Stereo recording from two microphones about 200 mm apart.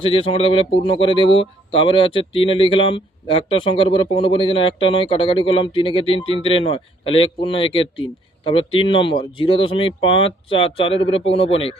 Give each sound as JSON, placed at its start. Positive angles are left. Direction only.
{"t": 0.0, "sound": "speech", "side_deg": 25}